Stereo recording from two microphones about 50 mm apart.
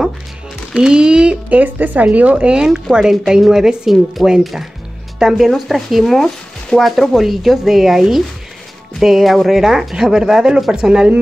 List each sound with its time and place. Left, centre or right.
0.7 s speech: centre
1.6 s speech: right; by 11.1 s centre